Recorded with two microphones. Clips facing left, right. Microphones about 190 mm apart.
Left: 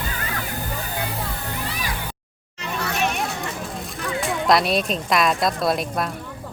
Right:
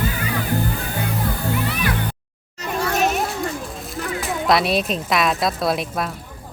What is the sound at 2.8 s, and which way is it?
Children playing, 45° right (ahead or behind).